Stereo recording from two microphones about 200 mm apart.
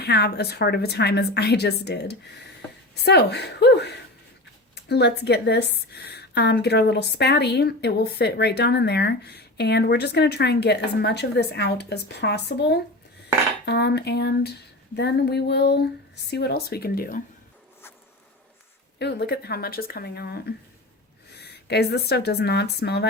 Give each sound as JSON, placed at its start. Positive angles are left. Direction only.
{"t": 0.0, "sound": "a woman's voice", "side_deg": 55}
{"t": 18.9, "sound": "speech", "side_deg": 55}